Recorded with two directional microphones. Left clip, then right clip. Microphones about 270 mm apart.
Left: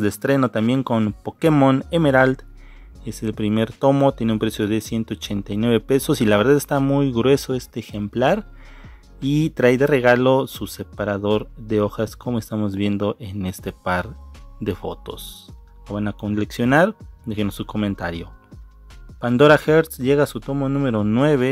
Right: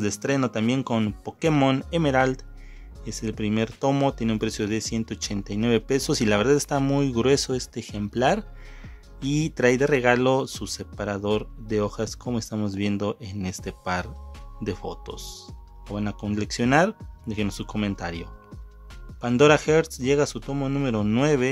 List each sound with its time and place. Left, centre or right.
0.0 s speech: centre